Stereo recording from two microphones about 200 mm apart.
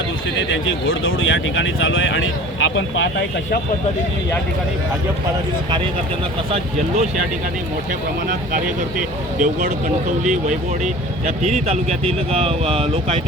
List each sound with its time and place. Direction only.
0.3 s speech: 65° left (ahead or behind)
9.0 s speech: 40° right (ahead or behind)